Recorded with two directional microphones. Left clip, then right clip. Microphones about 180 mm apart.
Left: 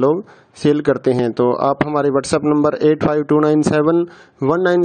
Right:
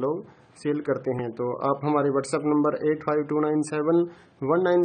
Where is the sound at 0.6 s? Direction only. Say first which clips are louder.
Left 11 dB; 55° left (ahead or behind).